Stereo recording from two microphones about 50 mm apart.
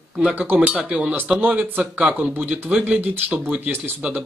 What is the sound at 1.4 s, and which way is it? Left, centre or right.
Speech, right.